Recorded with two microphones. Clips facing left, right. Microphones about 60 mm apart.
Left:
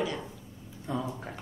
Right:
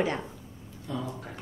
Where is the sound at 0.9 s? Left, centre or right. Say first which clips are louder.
Left 1 dB; left.